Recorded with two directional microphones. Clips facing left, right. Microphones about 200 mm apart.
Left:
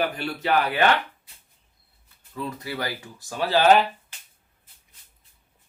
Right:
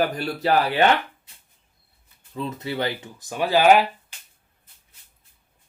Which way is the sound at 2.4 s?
25° right (ahead or behind).